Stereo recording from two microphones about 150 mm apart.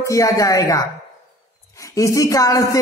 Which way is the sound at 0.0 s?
20° left (ahead or behind).